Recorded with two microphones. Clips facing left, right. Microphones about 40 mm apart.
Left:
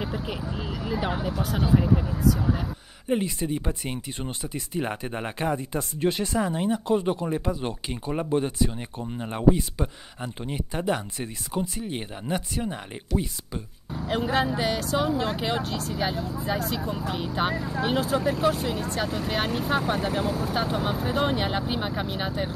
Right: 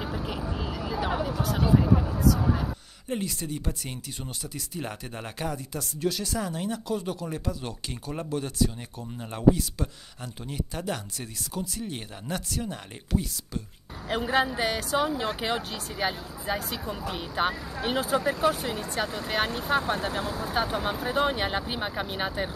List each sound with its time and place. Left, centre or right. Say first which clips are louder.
0.0 s speech: left 1 dB; centre
3.1 s speech: left 6 dB; left
14.0 s speech: left 1 dB; centre